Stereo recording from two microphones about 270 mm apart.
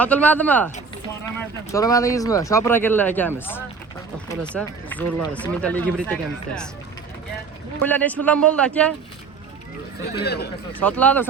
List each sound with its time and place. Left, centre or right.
0.0 s speech: centre
7.8 s speech: centre
10.1 s speech: left
10.8 s speech: centre